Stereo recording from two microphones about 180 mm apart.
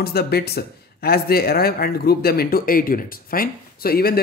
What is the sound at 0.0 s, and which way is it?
Speech, 60° left (ahead or behind).